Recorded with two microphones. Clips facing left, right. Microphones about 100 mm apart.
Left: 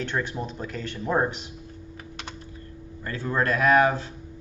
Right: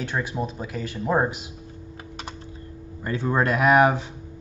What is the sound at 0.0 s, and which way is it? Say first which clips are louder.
Speech: right 1 dB; 10° right (ahead or behind).